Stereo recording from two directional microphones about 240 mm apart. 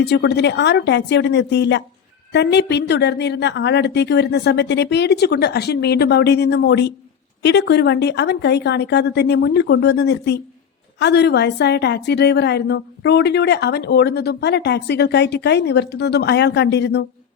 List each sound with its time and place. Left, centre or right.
0.0 s a woman's voice: left